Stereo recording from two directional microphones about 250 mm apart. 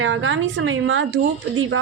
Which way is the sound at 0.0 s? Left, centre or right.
Right.